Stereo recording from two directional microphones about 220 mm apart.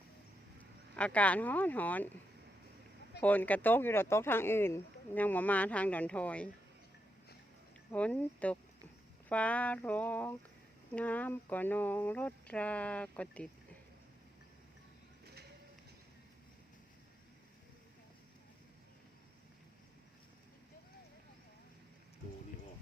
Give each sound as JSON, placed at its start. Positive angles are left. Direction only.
{"t": 0.9, "sound": "speech", "side_deg": 5}
{"t": 3.2, "sound": "speech", "side_deg": 5}
{"t": 7.9, "sound": "speech", "side_deg": 5}